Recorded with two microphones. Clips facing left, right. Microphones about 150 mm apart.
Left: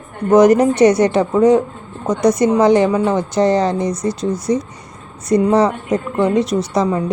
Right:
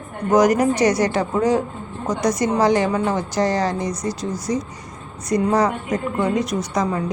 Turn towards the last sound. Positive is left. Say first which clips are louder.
# left 5 dB
turn(degrees=30)  # may be behind; listen again after turning